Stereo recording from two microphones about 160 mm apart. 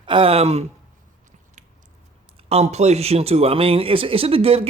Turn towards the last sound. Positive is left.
turn(degrees=-35)  # may be behind; listen again after turning